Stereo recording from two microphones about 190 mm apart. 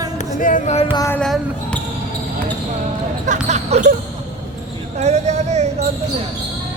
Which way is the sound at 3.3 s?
35° right (ahead or behind).